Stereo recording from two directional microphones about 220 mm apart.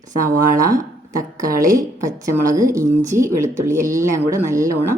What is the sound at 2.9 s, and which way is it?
Speech, 35° right (ahead or behind).